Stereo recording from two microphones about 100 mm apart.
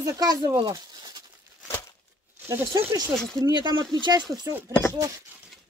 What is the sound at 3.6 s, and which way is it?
Speech, 45° right (ahead or behind).